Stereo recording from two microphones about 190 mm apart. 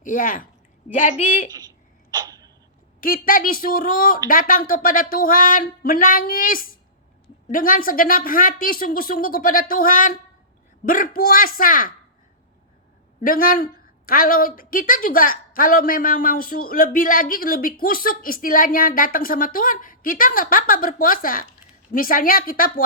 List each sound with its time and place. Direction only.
0.0 s a woman's voice: 45° left (ahead or behind)
3.0 s a woman's voice: 50° left (ahead or behind)
13.2 s a woman's voice: 50° left (ahead or behind)